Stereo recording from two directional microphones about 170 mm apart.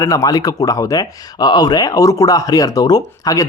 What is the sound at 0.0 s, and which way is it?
A man's voice, 20° left (ahead or behind).